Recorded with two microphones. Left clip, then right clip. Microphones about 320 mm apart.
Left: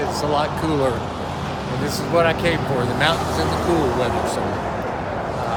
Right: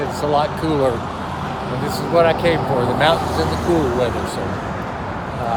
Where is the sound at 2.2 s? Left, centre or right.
Centre.